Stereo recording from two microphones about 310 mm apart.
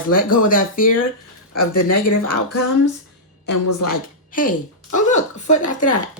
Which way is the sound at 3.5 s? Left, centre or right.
Left.